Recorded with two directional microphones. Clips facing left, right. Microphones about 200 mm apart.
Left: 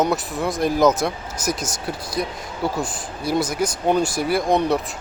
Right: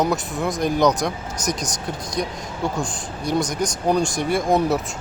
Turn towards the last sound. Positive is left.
turn(degrees=0)  # may be behind; listen again after turning